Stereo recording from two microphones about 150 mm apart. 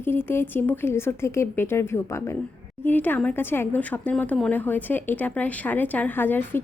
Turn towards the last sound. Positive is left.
turn(degrees=15)  # may be behind; listen again after turning